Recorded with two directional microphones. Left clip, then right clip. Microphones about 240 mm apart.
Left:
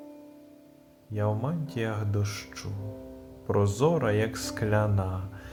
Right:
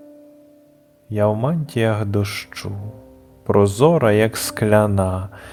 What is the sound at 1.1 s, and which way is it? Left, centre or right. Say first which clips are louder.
Speech: right 12 dB; right.